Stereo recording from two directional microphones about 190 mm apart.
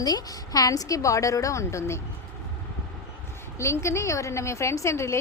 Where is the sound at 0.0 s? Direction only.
20° left (ahead or behind).